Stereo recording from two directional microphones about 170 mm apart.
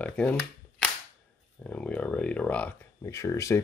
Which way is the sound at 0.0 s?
5° left (ahead or behind).